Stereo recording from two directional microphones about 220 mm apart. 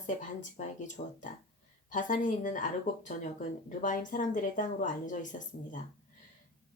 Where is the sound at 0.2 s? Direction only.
35° left (ahead or behind).